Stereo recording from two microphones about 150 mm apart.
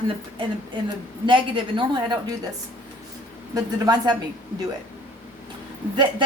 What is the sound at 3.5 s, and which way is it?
Speech, 25° right (ahead or behind).